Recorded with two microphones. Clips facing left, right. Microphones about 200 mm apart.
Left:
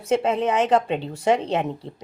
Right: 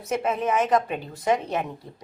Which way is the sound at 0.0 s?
30° left (ahead or behind).